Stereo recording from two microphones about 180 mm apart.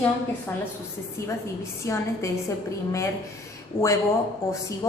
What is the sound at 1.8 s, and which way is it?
Speech, 15° left (ahead or behind).